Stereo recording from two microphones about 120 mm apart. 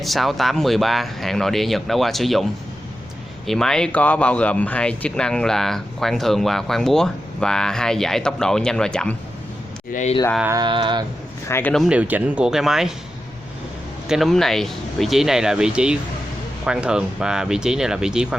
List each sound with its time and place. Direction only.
0.0 s speech: centre (ahead or behind)
9.9 s speech: 80° left
10.5 s mantra: 40° right (ahead or behind)
11.4 s speech: 20° left (ahead or behind)
11.9 s speech: 10° right (ahead or behind)
14.1 s speech: centre (ahead or behind)